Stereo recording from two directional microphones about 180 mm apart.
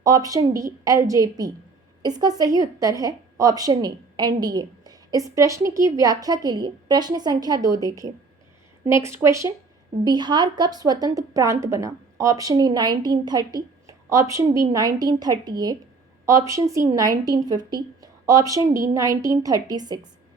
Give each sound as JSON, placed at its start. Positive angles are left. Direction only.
{"t": 0.0, "sound": "a woman's voice", "side_deg": -20}